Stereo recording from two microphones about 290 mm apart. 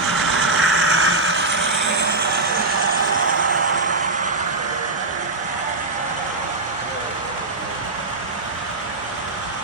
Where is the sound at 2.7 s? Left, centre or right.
Right.